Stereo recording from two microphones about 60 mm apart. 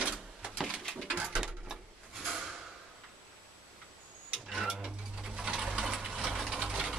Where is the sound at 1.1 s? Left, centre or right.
Centre.